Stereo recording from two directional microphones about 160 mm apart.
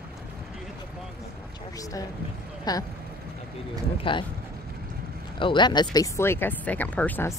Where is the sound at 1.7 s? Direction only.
20° left (ahead or behind).